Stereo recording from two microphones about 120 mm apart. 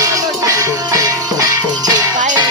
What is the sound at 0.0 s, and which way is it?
Music, 25° right (ahead or behind).